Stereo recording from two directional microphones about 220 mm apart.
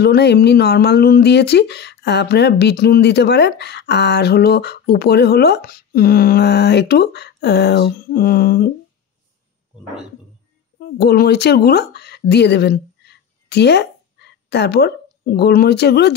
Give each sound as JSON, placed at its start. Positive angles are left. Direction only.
{"t": 0.0, "sound": "speech", "side_deg": 50}
{"t": 10.8, "sound": "a woman's voice", "side_deg": 45}